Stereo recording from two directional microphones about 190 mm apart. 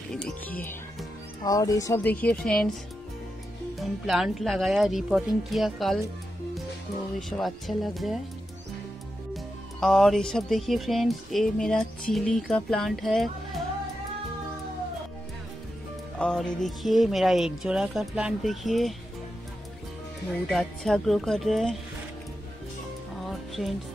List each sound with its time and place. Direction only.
0.1 s a woman's voice: 5° left (ahead or behind)
3.7 s speech: centre (ahead or behind)
7.2 s speech: centre (ahead or behind)
9.3 s speech: centre (ahead or behind)
16.2 s speech: 5° left (ahead or behind)
20.4 s speech: centre (ahead or behind)